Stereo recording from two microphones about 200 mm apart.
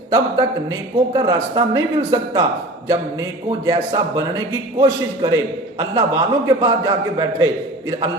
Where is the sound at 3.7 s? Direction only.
25° right (ahead or behind).